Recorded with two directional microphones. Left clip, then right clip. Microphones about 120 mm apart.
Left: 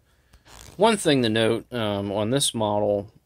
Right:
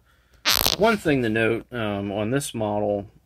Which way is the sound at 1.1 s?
15° left (ahead or behind).